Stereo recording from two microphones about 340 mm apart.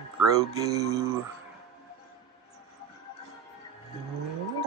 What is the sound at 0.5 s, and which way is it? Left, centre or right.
Speech, centre.